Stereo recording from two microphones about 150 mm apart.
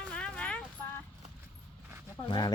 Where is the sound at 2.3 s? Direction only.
30° left (ahead or behind).